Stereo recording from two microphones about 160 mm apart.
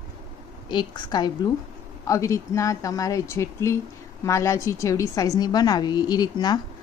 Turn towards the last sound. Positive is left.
turn(degrees=25)  # may be behind; listen again after turning